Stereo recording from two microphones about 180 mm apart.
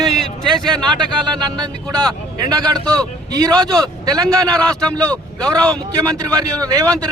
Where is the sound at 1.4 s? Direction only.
25° right (ahead or behind).